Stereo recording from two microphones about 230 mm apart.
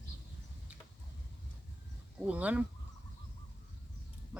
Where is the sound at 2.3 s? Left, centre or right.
Centre.